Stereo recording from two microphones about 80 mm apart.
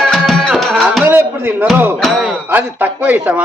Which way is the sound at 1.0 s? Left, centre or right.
Right.